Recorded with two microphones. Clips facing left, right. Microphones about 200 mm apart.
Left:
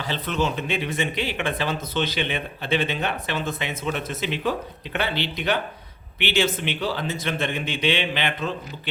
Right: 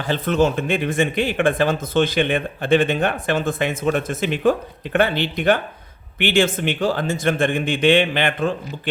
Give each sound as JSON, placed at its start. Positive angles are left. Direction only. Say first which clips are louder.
{"t": 0.0, "sound": "speech", "louder": "right 7 dB", "side_deg": -50}